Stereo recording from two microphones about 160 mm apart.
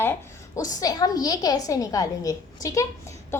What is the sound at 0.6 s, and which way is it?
A woman's voice, 25° left (ahead or behind).